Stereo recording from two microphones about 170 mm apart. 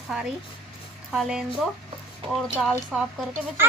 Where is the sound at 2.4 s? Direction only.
Centre (ahead or behind).